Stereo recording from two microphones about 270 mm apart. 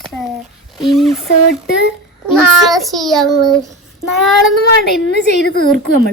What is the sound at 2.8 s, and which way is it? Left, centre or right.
Speech, centre.